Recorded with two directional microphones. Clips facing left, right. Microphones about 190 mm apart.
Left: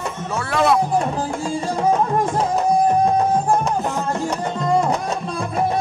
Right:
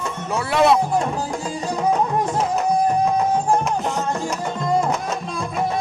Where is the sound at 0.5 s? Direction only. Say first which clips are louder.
Right 2 dB; 20° right (ahead or behind).